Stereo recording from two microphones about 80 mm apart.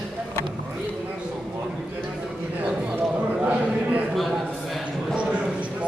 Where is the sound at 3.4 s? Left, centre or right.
Centre.